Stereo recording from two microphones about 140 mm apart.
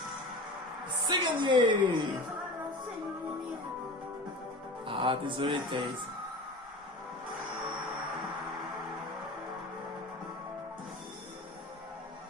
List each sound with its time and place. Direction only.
1.0 s a woman's voice: 35° right (ahead or behind)
4.9 s a woman's voice: 40° right (ahead or behind)